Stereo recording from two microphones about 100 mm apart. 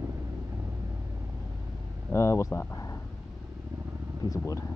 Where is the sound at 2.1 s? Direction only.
30° left (ahead or behind).